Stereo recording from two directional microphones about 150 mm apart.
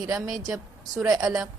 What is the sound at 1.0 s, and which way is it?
Speech, 20° right (ahead or behind).